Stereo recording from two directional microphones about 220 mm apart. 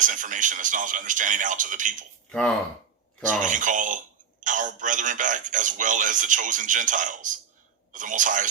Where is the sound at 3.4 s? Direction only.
35° right (ahead or behind).